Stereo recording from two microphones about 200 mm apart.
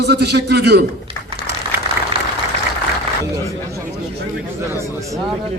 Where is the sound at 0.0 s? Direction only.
55° right (ahead or behind).